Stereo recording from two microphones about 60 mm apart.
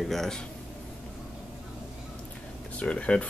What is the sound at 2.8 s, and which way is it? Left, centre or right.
Speech, centre.